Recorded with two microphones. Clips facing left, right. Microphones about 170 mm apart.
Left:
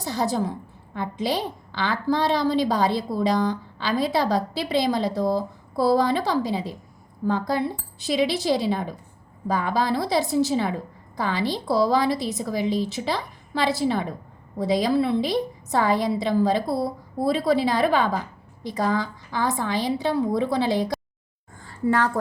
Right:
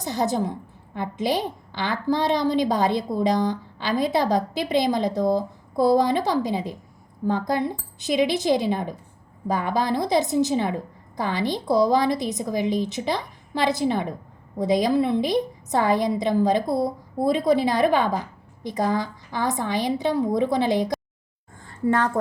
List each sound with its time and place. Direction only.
0.0 s a woman's voice: 20° right (ahead or behind)